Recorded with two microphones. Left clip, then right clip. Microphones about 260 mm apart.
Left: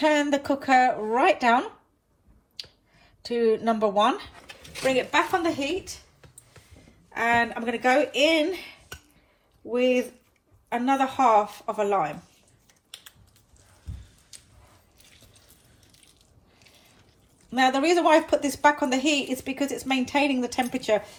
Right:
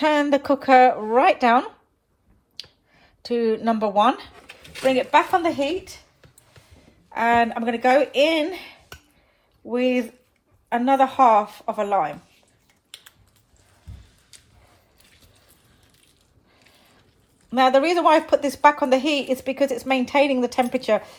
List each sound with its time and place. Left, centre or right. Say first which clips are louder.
0.0 s a woman's voice: right 3 dB; right
7.1 s a woman's voice: right 4 dB; right
17.5 s a woman's voice: right 4 dB; right